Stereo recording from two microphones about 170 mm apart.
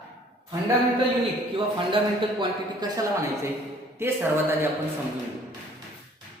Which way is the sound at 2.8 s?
25° right (ahead or behind).